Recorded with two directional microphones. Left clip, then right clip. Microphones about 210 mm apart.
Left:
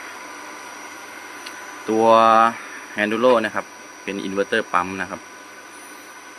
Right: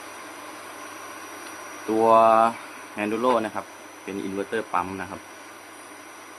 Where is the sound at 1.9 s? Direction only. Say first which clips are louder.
Left 3 dB; 10° left (ahead or behind).